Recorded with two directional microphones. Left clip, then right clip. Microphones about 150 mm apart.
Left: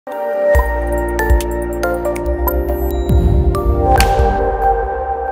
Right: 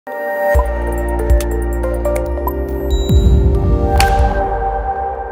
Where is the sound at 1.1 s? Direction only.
Centre (ahead or behind).